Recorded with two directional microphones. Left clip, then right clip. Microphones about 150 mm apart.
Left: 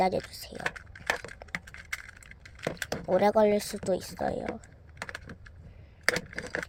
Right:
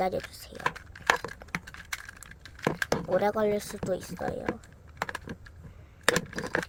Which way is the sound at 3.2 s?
20° left (ahead or behind).